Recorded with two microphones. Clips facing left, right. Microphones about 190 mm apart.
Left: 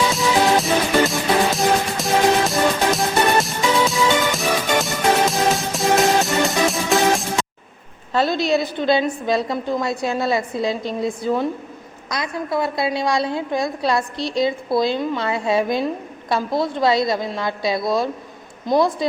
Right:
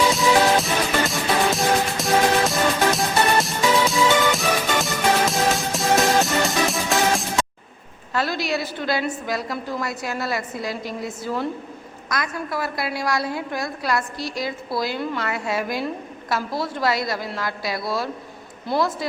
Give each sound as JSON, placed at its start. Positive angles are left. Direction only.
{"t": 0.1, "sound": "music", "side_deg": 0}
{"t": 8.1, "sound": "a woman's voice", "side_deg": 25}